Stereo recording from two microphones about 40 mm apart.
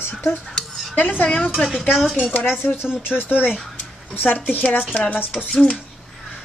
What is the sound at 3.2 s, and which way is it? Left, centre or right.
A woman's voice, left.